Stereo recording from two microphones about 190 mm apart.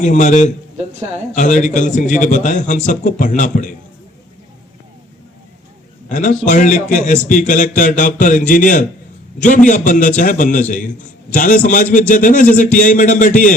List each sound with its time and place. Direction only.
0.0 s a man's voice: 40° left (ahead or behind)
6.1 s a man's voice: 45° left (ahead or behind)